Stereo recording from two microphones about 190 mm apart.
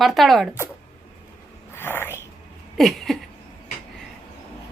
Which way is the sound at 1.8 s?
10° left (ahead or behind).